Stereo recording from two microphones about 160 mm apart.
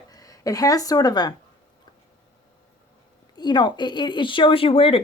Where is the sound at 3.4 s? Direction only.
30° left (ahead or behind).